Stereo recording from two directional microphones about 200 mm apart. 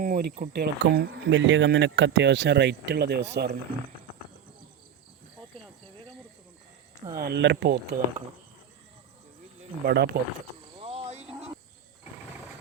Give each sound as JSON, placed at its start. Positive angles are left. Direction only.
{"t": 0.0, "sound": "speech", "side_deg": -45}
{"t": 7.2, "sound": "speech", "side_deg": -55}
{"t": 9.8, "sound": "speech", "side_deg": -55}
{"t": 10.8, "sound": "a sound", "side_deg": -30}